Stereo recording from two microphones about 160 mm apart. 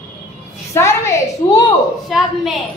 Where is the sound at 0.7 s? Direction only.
20° left (ahead or behind).